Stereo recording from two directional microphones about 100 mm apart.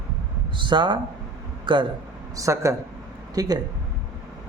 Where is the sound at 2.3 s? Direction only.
30° right (ahead or behind).